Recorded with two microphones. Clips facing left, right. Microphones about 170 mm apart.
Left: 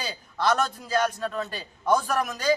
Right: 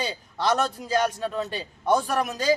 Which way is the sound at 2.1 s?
5° right (ahead or behind).